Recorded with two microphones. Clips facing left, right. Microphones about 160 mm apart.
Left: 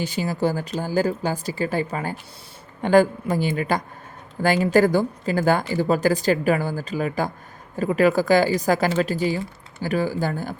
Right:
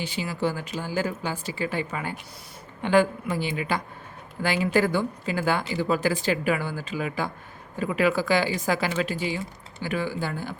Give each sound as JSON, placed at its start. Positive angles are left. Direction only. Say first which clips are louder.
{"t": 0.0, "sound": "a woman's voice", "louder": "left 4 dB", "side_deg": 40}